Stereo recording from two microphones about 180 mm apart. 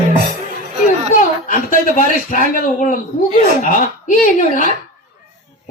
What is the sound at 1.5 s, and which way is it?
A man's voice, 45° left (ahead or behind).